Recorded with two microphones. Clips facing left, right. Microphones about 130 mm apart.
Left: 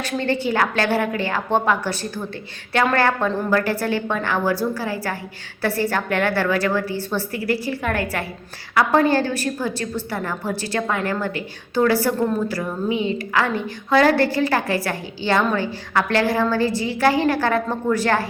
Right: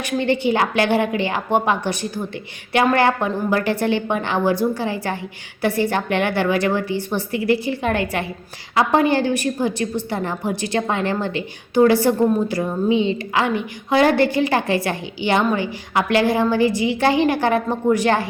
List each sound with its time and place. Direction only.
0.0 s a woman's voice: 15° right (ahead or behind)